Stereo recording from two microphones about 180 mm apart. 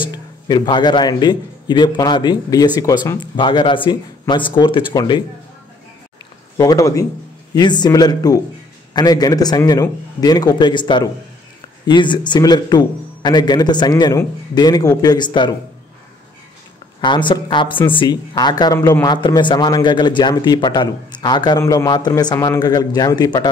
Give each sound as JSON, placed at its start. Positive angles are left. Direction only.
{"t": 0.0, "sound": "a man's voice", "side_deg": 25}
{"t": 6.5, "sound": "speech", "side_deg": 20}
{"t": 17.0, "sound": "speech", "side_deg": 25}